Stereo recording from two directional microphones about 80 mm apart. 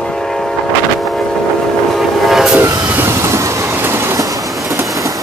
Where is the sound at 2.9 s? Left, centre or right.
Right.